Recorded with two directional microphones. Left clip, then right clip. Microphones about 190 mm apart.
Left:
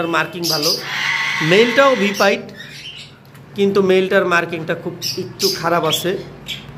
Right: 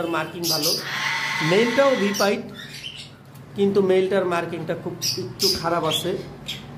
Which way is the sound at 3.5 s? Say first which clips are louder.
Left 5 dB; 10° left (ahead or behind).